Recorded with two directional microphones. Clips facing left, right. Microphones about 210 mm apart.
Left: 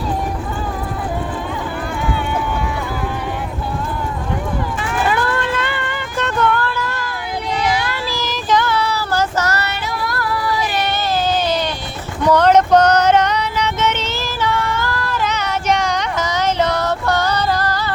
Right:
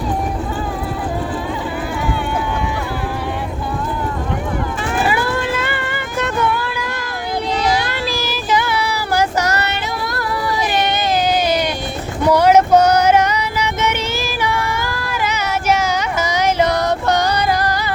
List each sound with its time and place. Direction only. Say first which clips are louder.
5.0 s vehicle: left 1 dB; 10° right (ahead or behind)
7.6 s vehicle: even; 40° right (ahead or behind)
8.1 s child singing: left 2 dB; 10° right (ahead or behind)
12.2 s a sound: right 1 dB; 10° right (ahead or behind)